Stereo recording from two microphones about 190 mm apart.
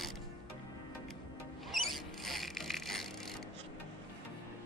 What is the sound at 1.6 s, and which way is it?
Vehicle, centre (ahead or behind).